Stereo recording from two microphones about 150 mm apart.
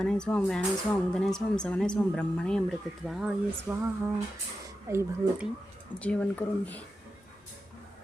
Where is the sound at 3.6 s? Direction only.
15° right (ahead or behind).